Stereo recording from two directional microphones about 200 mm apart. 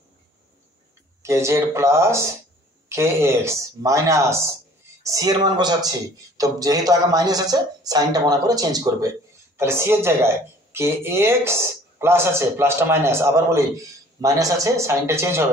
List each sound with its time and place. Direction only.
1.2 s speech: 15° right (ahead or behind)